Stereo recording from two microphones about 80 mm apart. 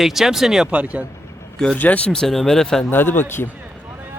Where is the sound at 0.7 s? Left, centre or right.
Centre.